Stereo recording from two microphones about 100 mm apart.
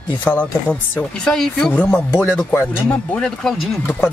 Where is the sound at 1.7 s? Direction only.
20° left (ahead or behind).